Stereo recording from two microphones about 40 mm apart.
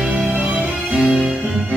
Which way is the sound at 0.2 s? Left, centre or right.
Centre.